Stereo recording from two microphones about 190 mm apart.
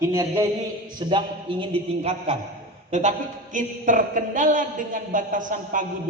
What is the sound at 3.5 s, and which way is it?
A man's voice, 45° right (ahead or behind).